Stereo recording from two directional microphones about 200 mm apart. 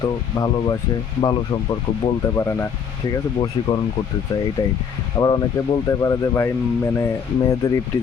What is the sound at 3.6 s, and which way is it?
Speech, 25° left (ahead or behind).